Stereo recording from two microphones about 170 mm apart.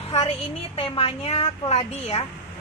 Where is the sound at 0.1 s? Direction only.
35° left (ahead or behind).